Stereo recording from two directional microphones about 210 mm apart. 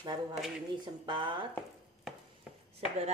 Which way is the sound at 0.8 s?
20° right (ahead or behind).